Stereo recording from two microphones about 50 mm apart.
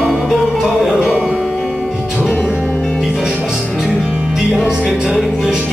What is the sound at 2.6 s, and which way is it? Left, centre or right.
Music, left.